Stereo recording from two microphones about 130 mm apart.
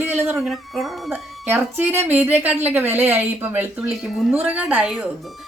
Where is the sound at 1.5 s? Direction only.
15° right (ahead or behind).